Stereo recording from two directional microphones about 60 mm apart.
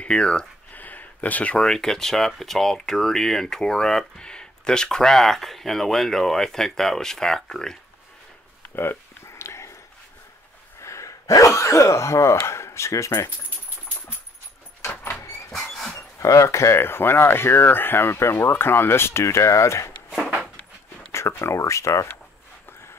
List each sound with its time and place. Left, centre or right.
0.0 s speech: centre
0.7 s a sound: left
1.6 s speech: centre
8.7 s a sound: left
10.8 s speech: left
14.8 s vehicle: left
16.2 s speech: left
21.1 s speech: left